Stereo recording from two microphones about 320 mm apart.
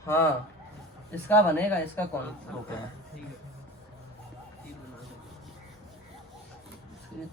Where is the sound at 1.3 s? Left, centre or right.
Centre.